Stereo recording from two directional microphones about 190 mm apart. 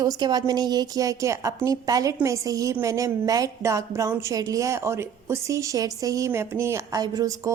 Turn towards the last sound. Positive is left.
turn(degrees=-15)  # may be behind; listen again after turning